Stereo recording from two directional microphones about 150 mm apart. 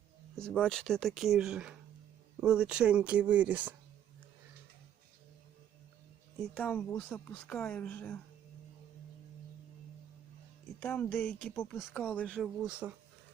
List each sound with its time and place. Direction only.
0.3 s speech: 5° left (ahead or behind); by 3.8 s 10° right (ahead or behind)
6.5 s a woman's voice: 10° left (ahead or behind)
7.3 s a woman's voice: 5° left (ahead or behind)
10.8 s a woman's voice: 10° left (ahead or behind)
11.5 s a woman's voice: 15° left (ahead or behind)
12.6 s speech: 5° right (ahead or behind)